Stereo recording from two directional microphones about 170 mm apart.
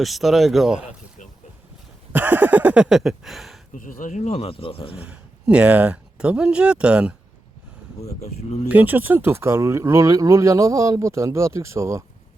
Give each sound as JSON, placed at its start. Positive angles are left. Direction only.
{"t": 0.0, "sound": "speech", "side_deg": 0}
{"t": 2.1, "sound": "a sound", "side_deg": -10}
{"t": 3.8, "sound": "speech", "side_deg": 50}
{"t": 5.0, "sound": "speech", "side_deg": -5}
{"t": 8.0, "sound": "speech", "side_deg": 40}
{"t": 8.7, "sound": "speech", "side_deg": -10}